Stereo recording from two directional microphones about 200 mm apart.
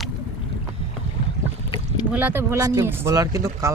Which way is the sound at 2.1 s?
10° right (ahead or behind).